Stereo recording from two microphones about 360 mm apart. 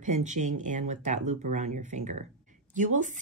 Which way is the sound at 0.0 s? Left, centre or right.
Centre.